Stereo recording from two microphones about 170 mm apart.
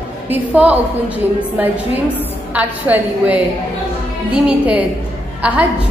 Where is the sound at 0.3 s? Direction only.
10° right (ahead or behind).